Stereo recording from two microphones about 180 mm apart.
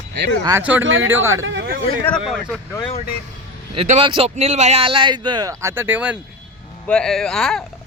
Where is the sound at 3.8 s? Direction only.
35° right (ahead or behind); by 6.1 s 10° right (ahead or behind).